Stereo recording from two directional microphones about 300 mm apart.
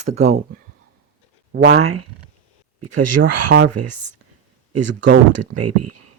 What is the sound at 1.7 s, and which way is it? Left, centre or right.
Speech, right.